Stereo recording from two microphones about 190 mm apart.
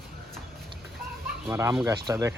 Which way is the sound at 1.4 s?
15° right (ahead or behind).